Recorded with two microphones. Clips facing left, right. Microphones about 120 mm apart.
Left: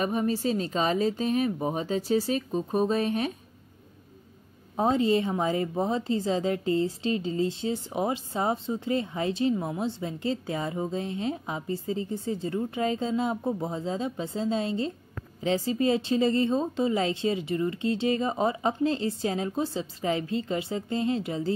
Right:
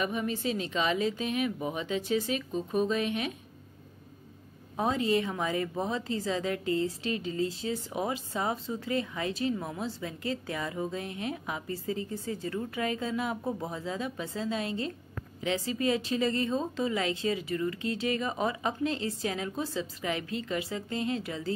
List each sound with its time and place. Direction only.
0.0 s speech: 35° left (ahead or behind)
4.7 s a woman's voice: 30° left (ahead or behind)